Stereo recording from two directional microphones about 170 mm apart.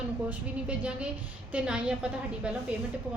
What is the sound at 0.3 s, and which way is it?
A woman's voice, 5° right (ahead or behind).